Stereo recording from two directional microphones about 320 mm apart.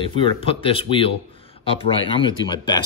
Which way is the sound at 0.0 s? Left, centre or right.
Centre.